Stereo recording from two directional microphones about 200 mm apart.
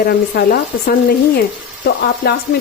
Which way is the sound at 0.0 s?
50° left (ahead or behind).